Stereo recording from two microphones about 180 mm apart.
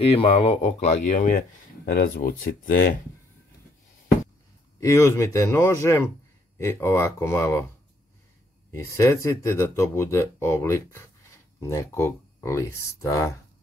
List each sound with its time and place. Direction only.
0.1 s speech: 30° left (ahead or behind)
1.9 s speech: 60° left (ahead or behind)
4.7 s speech: 15° left (ahead or behind)
8.7 s speech: 15° left (ahead or behind)